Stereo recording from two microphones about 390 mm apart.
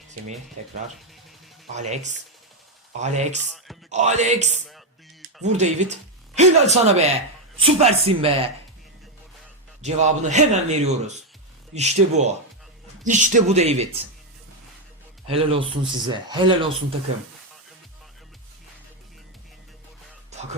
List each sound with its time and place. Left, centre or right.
1.7 s speech: centre
9.8 s speech: centre
15.3 s speech: centre